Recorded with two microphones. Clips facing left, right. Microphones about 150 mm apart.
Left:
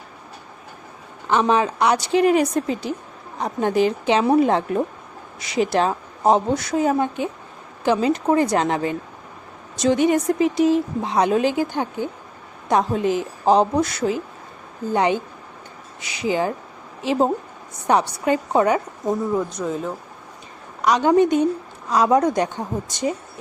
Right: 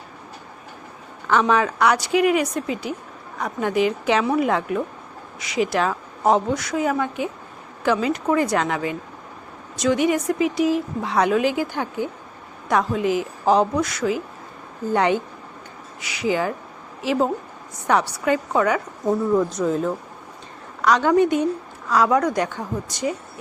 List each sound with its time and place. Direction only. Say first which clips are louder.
1.3 s a woman's voice: left 1 dB; 20° left (ahead or behind)
13.0 s a woman's voice: even; 10° right (ahead or behind)
13.4 s speech: left 2 dB; 20° left (ahead or behind)
16.0 s speech: even; 20° left (ahead or behind)
19.0 s speech: right 4 dB; centre (ahead or behind)
20.8 s speech: left 1 dB; 20° left (ahead or behind)